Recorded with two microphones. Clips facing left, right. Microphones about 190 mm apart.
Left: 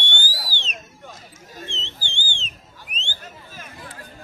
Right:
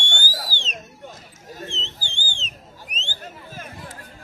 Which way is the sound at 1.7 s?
40° right (ahead or behind).